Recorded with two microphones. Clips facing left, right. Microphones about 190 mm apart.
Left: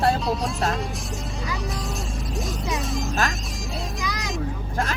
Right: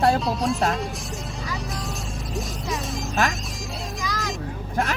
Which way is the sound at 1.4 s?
Centre (ahead or behind).